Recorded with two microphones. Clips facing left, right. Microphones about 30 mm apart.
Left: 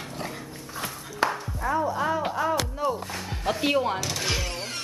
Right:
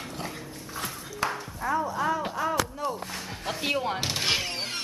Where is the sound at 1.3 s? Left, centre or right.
Centre.